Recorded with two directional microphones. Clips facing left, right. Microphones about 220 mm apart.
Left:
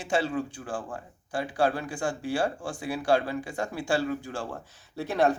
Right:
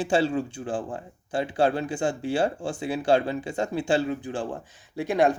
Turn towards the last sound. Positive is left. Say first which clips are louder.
# right 3 dB
turn(degrees=-15)  # may be behind; listen again after turning